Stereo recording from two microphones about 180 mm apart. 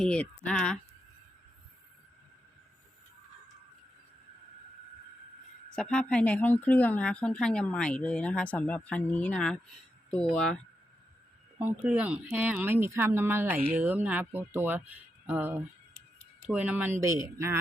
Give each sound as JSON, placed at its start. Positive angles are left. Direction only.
{"t": 0.0, "sound": "speech", "side_deg": 5}
{"t": 5.7, "sound": "speech", "side_deg": 5}
{"t": 11.6, "sound": "speech", "side_deg": -10}